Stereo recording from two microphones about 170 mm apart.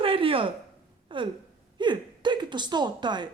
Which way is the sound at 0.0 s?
30° right (ahead or behind).